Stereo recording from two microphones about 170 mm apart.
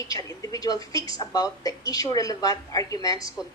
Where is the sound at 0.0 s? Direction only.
20° left (ahead or behind).